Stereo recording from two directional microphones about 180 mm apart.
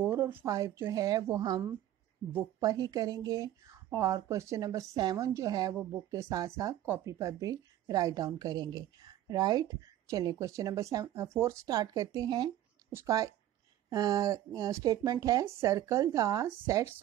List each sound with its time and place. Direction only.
0.1 s speech: 10° right (ahead or behind)